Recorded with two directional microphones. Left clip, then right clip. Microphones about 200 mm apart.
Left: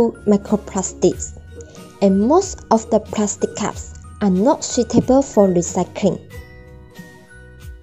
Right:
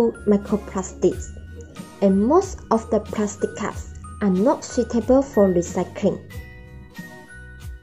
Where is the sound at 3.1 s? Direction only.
40° left (ahead or behind).